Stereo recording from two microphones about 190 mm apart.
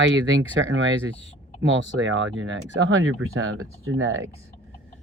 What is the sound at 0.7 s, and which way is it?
Speech, 90° right.